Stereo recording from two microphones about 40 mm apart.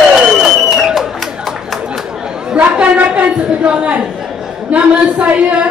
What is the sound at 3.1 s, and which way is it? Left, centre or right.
A woman's voice, right.